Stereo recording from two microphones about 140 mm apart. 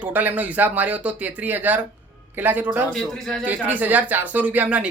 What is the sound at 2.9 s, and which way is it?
Speech, centre (ahead or behind).